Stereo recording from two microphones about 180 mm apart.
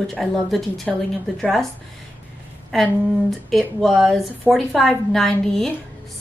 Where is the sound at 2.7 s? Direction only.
Centre (ahead or behind).